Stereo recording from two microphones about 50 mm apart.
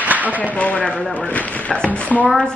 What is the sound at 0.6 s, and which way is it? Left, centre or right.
Speech, left.